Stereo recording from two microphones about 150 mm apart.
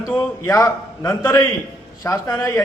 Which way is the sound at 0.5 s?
20° left (ahead or behind).